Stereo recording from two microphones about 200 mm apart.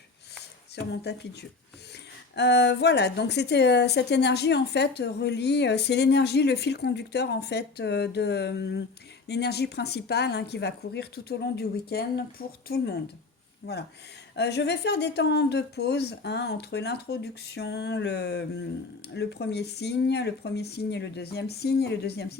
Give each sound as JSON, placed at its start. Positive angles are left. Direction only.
{"t": 1.0, "sound": "a woman's voice", "side_deg": 55}